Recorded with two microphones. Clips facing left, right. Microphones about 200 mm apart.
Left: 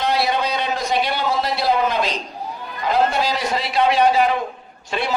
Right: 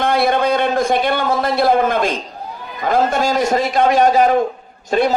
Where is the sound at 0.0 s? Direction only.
50° right (ahead or behind).